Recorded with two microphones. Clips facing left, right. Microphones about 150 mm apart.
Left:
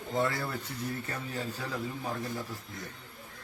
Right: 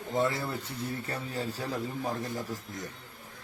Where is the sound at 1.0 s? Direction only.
35° right (ahead or behind).